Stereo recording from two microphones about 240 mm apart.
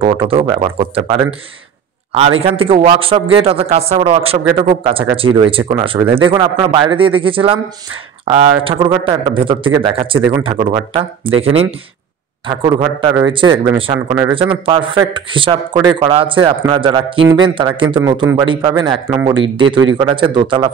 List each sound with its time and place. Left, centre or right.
0.0 s a man's voice: right
2.4 s a man's voice: right
12.4 s a man's voice: right